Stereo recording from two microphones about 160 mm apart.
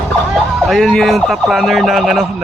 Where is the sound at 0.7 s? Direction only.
Centre (ahead or behind).